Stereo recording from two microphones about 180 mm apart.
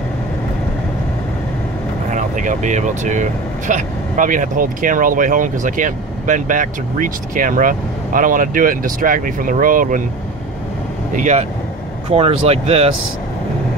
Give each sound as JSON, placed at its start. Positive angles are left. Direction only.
{"t": 2.0, "sound": "speech", "side_deg": -45}
{"t": 11.1, "sound": "speech", "side_deg": -40}
{"t": 12.1, "sound": "speech", "side_deg": -30}